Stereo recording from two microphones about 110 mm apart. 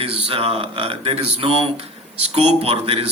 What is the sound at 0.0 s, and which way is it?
Speech, 60° right (ahead or behind).